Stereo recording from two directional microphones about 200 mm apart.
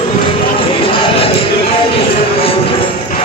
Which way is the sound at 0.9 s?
25° left (ahead or behind).